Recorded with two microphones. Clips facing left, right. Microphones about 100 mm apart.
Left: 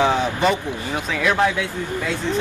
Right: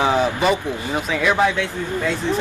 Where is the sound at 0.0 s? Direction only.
5° right (ahead or behind).